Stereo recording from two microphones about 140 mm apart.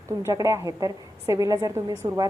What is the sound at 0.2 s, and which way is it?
A woman's voice, 20° right (ahead or behind).